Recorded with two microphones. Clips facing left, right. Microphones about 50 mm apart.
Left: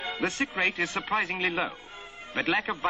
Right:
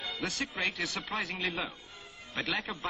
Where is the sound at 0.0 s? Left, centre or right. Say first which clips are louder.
Left 6 dB; left.